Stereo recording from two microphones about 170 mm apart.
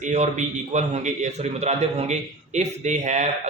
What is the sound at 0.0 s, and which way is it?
Speech, 45° right (ahead or behind).